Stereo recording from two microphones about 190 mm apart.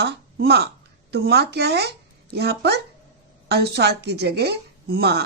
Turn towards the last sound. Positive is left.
turn(degrees=-60)  # may be behind; listen again after turning